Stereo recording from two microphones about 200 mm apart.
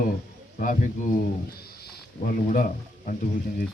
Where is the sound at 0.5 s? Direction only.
40° left (ahead or behind).